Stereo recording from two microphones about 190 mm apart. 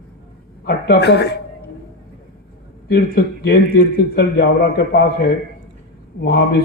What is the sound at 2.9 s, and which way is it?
A man's voice, 55° left (ahead or behind).